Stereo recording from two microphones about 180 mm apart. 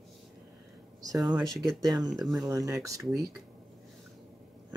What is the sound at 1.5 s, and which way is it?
Speech, centre (ahead or behind).